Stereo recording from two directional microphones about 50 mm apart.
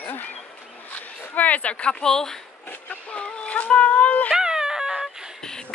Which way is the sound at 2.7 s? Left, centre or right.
Left.